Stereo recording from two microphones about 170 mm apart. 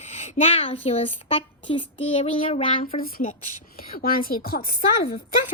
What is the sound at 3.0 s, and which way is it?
Speech, 50° left (ahead or behind).